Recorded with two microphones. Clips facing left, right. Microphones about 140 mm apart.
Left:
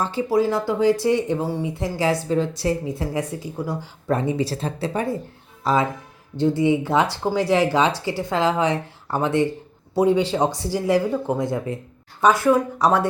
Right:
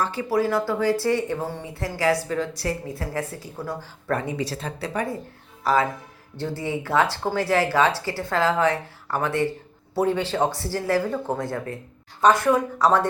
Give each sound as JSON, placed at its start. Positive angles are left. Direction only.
{"t": 0.0, "sound": "speech", "side_deg": 25}
{"t": 2.0, "sound": "speech", "side_deg": 25}
{"t": 4.2, "sound": "speech", "side_deg": 30}